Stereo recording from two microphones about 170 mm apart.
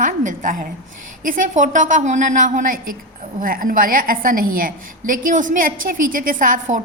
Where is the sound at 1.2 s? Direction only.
50° right (ahead or behind).